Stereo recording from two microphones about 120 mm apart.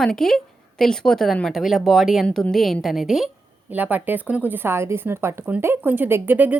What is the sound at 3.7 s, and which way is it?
A woman's voice, 15° right (ahead or behind).